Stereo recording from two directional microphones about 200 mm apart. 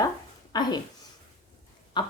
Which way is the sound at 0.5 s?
20° left (ahead or behind).